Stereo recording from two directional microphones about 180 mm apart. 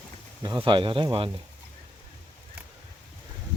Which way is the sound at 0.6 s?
30° right (ahead or behind).